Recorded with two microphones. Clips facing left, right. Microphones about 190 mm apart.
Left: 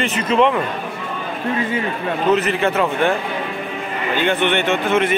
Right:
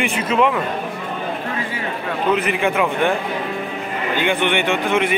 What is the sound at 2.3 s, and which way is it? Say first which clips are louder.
Speech: left 2 dB; 10° right (ahead or behind).